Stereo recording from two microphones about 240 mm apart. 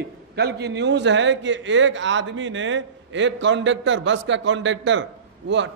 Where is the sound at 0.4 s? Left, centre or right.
Right.